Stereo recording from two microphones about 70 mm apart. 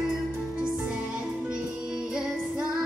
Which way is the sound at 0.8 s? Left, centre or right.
Centre.